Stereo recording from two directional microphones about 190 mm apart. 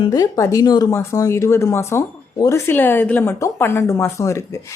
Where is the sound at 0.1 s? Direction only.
20° left (ahead or behind).